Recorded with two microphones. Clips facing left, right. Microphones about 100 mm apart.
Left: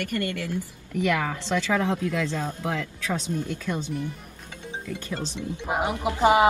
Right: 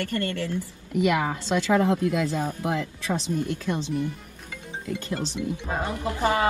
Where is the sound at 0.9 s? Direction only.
20° right (ahead or behind).